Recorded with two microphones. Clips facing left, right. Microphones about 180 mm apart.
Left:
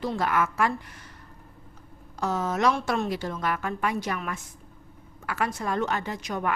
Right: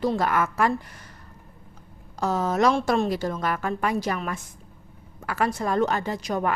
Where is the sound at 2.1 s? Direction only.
35° right (ahead or behind).